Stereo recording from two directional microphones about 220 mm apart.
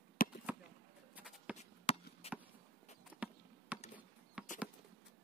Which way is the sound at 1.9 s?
25° left (ahead or behind).